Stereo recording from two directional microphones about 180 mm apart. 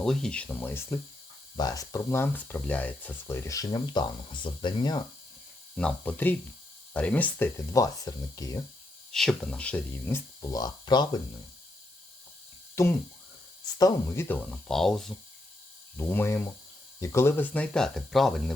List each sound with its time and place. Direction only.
0.0 s speech: 5° left (ahead or behind); by 5.0 s 25° left (ahead or behind)
5.7 s speech: 5° left (ahead or behind)
9.1 s speech: 5° left (ahead or behind); by 11.2 s 25° left (ahead or behind)
12.7 s speech: 15° left (ahead or behind)